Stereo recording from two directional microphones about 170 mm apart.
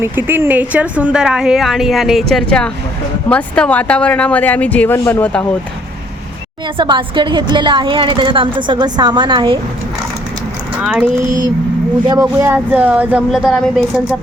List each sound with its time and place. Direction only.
0.0 s a woman's voice: 10° right (ahead or behind); by 5.5 s 10° left (ahead or behind)
6.7 s a woman's voice: 30° right (ahead or behind)
10.8 s speech: 5° right (ahead or behind)
12.4 s speech: 10° right (ahead or behind)